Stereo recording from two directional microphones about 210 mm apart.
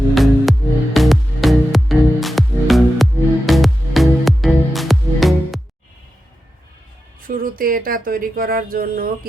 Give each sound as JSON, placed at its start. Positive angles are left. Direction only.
{"t": 0.1, "sound": "music", "side_deg": 0}
{"t": 7.2, "sound": "speech", "side_deg": -40}